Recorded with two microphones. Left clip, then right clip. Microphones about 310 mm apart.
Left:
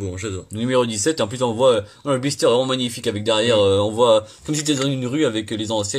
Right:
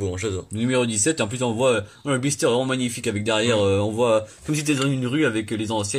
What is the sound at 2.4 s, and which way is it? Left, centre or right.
Speech, centre.